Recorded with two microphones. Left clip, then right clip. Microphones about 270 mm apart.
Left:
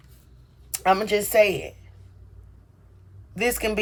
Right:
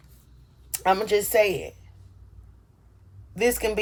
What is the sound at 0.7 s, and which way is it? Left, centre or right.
Speech, centre.